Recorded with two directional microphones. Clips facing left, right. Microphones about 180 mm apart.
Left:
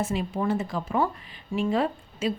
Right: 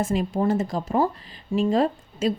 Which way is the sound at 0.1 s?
45° right (ahead or behind).